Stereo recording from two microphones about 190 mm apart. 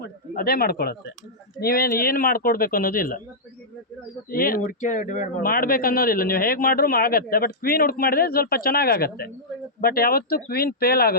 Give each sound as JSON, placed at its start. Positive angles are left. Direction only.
{"t": 0.0, "sound": "speech", "side_deg": 50}
{"t": 4.3, "sound": "speech", "side_deg": 50}